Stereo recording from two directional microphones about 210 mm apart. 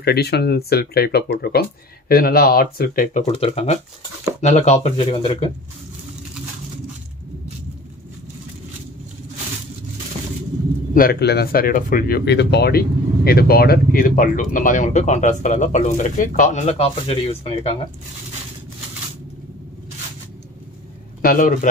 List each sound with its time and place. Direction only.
0.0 s speech: 50° left (ahead or behind); by 5.5 s 25° left (ahead or behind)
11.0 s speech: 50° left (ahead or behind); by 17.7 s 25° left (ahead or behind)
21.2 s speech: 40° left (ahead or behind)